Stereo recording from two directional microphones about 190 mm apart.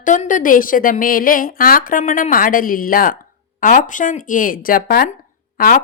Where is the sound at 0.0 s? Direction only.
45° left (ahead or behind).